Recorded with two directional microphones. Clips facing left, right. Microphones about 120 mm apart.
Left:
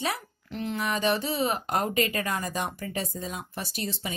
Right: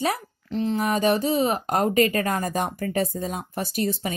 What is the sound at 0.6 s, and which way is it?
A woman's voice, 35° right (ahead or behind).